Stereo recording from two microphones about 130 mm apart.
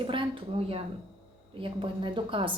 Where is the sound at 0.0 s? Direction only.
40° right (ahead or behind).